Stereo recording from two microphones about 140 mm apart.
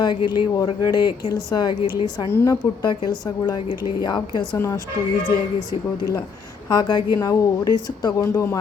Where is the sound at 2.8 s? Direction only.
30° left (ahead or behind).